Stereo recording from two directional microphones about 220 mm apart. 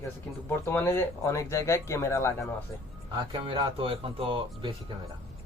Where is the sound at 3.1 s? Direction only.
20° right (ahead or behind).